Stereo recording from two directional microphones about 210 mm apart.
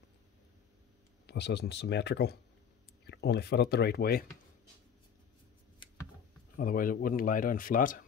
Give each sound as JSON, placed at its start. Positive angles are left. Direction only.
{"t": 1.2, "sound": "speech", "side_deg": 55}
{"t": 6.5, "sound": "speech", "side_deg": 40}